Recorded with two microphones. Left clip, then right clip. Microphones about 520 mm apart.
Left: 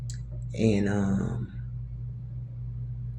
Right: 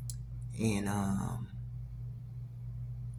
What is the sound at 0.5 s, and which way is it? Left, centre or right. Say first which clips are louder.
Speech: left 9 dB; right.